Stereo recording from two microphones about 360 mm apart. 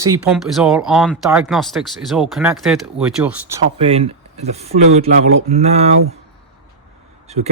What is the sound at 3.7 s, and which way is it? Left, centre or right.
Speech, centre.